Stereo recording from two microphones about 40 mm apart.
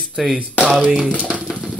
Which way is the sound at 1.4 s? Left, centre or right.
Centre.